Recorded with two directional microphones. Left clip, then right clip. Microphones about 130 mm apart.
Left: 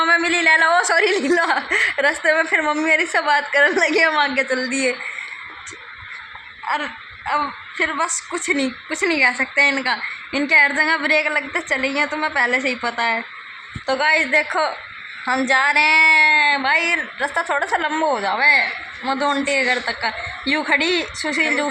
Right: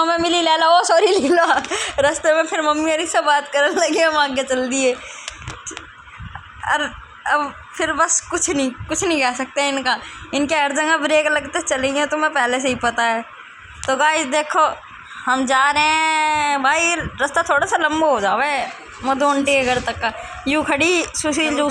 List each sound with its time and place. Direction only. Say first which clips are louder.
0.3 s a woman's voice: even; 35° right (ahead or behind)
1.3 s a woman's voice: right 2 dB; 20° right (ahead or behind)
6.7 s a woman's voice: right 3 dB; 30° right (ahead or behind)
12.2 s a woman's voice: even; 20° right (ahead or behind)